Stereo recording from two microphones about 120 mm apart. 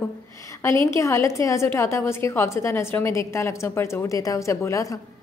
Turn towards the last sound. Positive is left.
turn(degrees=25)  # may be behind; listen again after turning